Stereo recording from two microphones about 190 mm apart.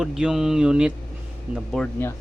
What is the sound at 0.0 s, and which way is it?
Speech, 5° right (ahead or behind).